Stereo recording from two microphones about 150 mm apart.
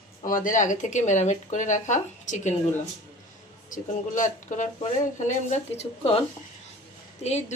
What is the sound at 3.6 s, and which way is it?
A woman's voice, 60° left (ahead or behind).